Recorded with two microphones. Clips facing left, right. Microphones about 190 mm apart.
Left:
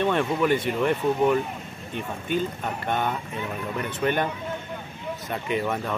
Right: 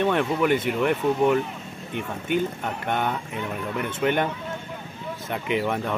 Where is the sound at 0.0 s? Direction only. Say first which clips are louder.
Right 1 dB; 10° right (ahead or behind).